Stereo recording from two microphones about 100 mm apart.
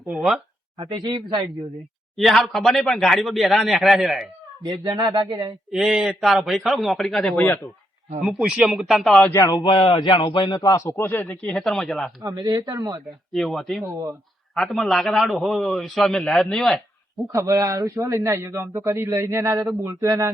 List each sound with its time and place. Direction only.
0.1 s a man's voice: 5° right (ahead or behind)
0.8 s speech: 50° right (ahead or behind)
2.1 s a man's voice: centre (ahead or behind)
4.6 s speech: 45° right (ahead or behind)
5.7 s a man's voice: 5° right (ahead or behind); by 7.6 s 10° left (ahead or behind)
8.2 s a man's voice: 5° right (ahead or behind)
9.3 s speech: 30° left (ahead or behind)
9.6 s speech: 55° left (ahead or behind); by 11.3 s 20° left (ahead or behind)
11.3 s a man's voice: 10° left (ahead or behind)
12.2 s speech: 40° right (ahead or behind)
13.3 s a man's voice: centre (ahead or behind)
17.3 s a man's voice: 40° right (ahead or behind)